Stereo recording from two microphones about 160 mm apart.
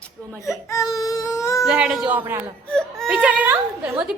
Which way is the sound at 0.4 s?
20° left (ahead or behind).